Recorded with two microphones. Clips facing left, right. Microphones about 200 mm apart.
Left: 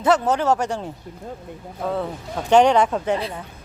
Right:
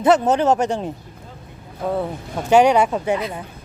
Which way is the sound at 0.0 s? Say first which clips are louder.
Right 3 dB; 20° right (ahead or behind).